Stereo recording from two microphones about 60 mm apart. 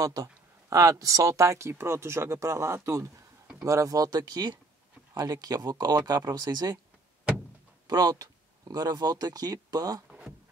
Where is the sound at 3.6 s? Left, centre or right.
Right.